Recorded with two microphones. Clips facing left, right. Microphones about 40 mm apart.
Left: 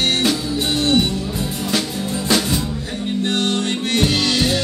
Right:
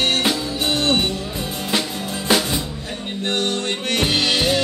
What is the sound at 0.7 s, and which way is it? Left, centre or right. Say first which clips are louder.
Music: left 3 dB; right.